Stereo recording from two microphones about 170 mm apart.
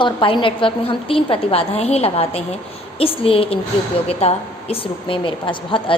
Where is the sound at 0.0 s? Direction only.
30° left (ahead or behind).